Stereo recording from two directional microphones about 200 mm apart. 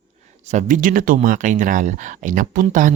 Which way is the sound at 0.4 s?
40° right (ahead or behind).